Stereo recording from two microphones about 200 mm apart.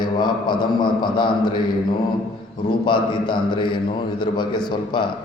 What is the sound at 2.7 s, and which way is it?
A man's voice, 25° left (ahead or behind).